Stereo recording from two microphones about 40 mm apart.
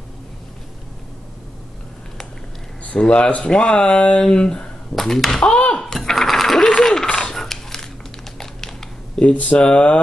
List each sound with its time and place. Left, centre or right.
2.8 s speech: left
4.9 s speech: centre
5.8 s a sound: centre
7.3 s a sound: centre
8.4 s typing: centre
9.3 s speech: left